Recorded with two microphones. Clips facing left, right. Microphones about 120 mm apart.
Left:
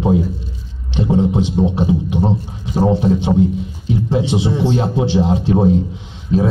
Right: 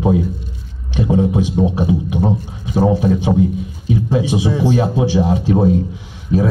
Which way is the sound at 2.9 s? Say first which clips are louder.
Left 3 dB; 15° right (ahead or behind).